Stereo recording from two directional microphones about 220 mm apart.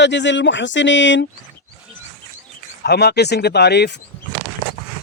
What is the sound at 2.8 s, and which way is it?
Speech, 45° left (ahead or behind).